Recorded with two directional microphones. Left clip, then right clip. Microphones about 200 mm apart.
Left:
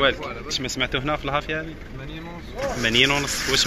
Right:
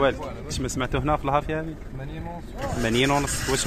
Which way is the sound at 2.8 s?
25° right (ahead or behind).